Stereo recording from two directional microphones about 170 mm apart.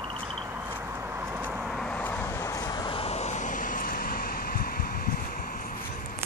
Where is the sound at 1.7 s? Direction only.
5° left (ahead or behind); by 6.1 s 55° left (ahead or behind).